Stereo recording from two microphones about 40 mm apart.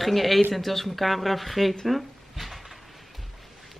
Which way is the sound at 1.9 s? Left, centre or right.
Centre.